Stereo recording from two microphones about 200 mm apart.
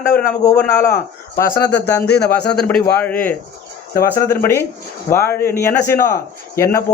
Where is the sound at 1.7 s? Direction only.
55° left (ahead or behind).